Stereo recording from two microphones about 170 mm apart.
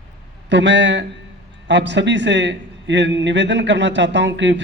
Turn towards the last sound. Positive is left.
turn(degrees=-90)